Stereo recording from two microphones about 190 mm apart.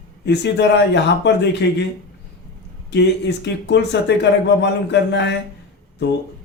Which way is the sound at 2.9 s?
65° left (ahead or behind).